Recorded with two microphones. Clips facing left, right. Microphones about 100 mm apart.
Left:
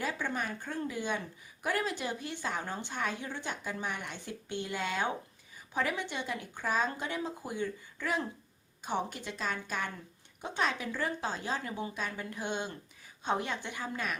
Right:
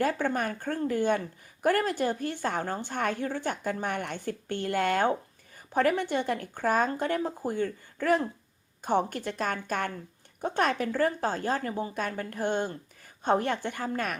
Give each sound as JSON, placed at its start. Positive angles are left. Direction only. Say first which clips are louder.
{"t": 0.0, "sound": "a woman's voice", "louder": "right 7 dB", "side_deg": -50}